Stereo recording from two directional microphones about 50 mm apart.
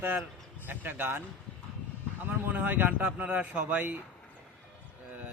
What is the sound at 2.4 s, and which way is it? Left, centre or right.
A man's voice, right.